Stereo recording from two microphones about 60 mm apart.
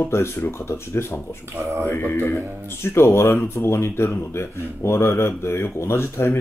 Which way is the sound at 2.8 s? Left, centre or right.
Left.